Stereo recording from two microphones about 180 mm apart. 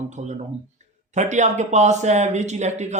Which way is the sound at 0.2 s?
40° right (ahead or behind).